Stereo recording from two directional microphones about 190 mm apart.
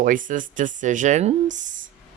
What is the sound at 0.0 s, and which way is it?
Speech, 45° right (ahead or behind).